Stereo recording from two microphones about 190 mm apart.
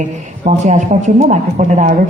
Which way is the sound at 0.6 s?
40° right (ahead or behind).